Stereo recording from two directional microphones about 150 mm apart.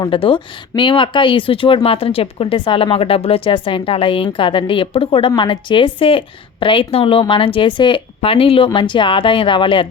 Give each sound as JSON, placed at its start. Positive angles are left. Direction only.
{"t": 0.0, "sound": "speech", "side_deg": 35}